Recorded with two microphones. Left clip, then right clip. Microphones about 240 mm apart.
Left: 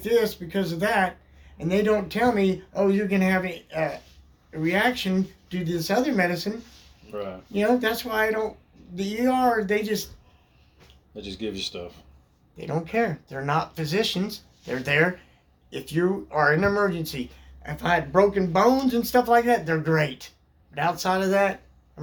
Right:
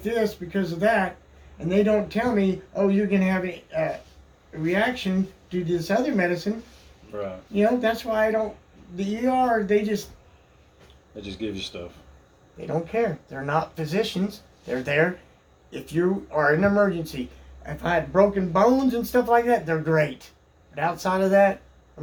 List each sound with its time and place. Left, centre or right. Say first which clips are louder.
0.0 s speech: left 3 dB; left
11.2 s speech: left 1 dB; left
12.5 s speech: even; left